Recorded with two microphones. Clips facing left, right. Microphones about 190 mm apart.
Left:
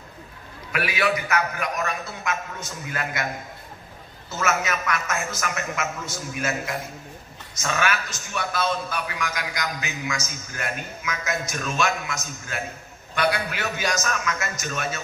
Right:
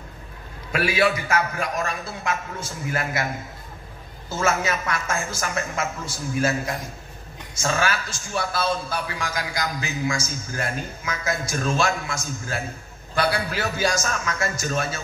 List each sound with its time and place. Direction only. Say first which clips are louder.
0.7 s a man's voice: right 3 dB; 30° right (ahead or behind)
4.3 s a man's voice: right 2 dB; 30° right (ahead or behind)